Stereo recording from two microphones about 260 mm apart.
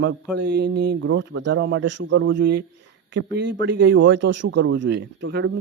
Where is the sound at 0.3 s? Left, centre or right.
Right.